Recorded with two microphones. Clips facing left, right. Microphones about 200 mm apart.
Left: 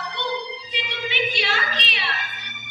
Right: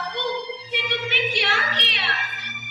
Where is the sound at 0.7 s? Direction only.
60° right (ahead or behind).